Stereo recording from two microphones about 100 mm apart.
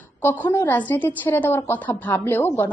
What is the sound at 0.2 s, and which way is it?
A woman's voice, 20° left (ahead or behind).